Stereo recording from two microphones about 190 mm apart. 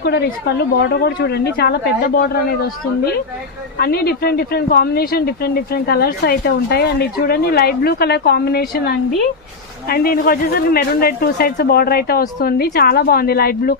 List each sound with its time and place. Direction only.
0.0 s speech: 55° left (ahead or behind)
3.7 s speech: 55° left (ahead or behind)